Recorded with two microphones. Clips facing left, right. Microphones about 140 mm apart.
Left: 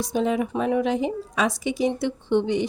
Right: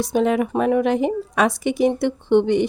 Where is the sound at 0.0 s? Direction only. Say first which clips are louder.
Right 4 dB; 65° right (ahead or behind).